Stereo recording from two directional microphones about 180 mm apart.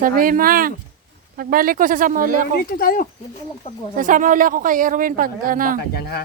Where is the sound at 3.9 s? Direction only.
50° right (ahead or behind).